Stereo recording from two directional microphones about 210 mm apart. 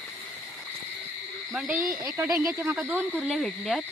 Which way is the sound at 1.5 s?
5° right (ahead or behind).